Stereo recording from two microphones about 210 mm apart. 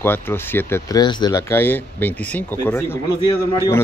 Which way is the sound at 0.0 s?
10° left (ahead or behind).